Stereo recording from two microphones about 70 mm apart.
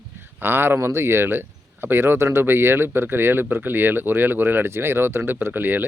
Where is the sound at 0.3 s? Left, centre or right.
Right.